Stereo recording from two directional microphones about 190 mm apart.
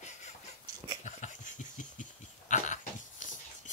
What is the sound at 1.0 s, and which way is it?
Cough, 40° left (ahead or behind).